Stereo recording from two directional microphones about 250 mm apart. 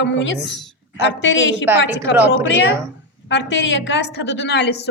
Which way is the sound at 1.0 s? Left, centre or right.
Left.